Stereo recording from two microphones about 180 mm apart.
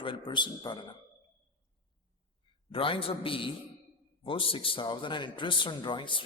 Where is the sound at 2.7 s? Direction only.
30° left (ahead or behind).